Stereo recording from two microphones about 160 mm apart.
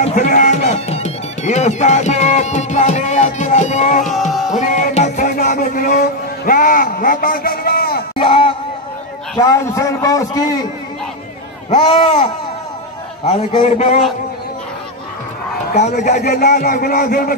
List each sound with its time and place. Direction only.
0.0 s music: 55° left (ahead or behind); by 8.0 s 70° left (ahead or behind)
8.2 s a sound: 35° left (ahead or behind)
9.4 s a man's voice: 20° left (ahead or behind)
13.2 s a man's voice: 45° left (ahead or behind)
16.0 s speech: 65° left (ahead or behind)